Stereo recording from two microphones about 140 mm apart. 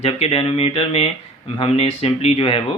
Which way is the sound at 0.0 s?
45° left (ahead or behind).